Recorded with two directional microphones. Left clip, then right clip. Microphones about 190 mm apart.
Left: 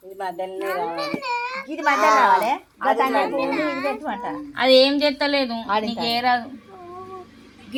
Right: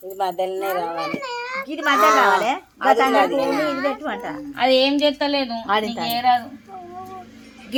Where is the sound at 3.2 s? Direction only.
20° right (ahead or behind).